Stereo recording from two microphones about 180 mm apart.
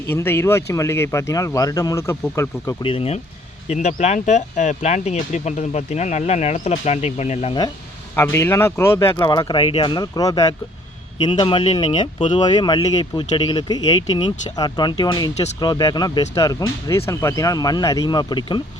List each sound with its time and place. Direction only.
0.1 s speech: 15° left (ahead or behind)
2.8 s speech: 30° left (ahead or behind)
8.1 s speech: 15° left (ahead or behind)